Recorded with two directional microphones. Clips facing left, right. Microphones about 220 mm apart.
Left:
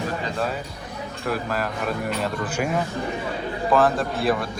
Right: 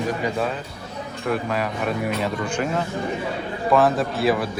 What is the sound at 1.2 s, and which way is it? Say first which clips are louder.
Speech: right 2 dB; centre (ahead or behind).